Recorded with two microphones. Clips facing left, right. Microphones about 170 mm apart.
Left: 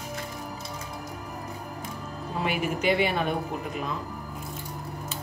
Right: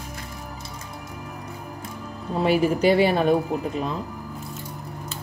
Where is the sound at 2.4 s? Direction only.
35° right (ahead or behind).